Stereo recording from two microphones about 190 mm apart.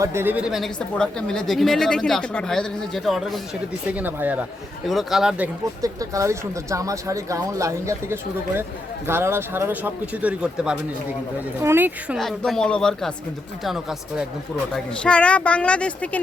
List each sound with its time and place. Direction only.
0.0 s speech: 15° right (ahead or behind)
5.8 s speech: 15° right (ahead or behind); by 16.2 s 5° left (ahead or behind)